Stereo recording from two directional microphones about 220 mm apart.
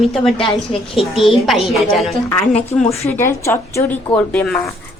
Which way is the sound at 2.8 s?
30° left (ahead or behind).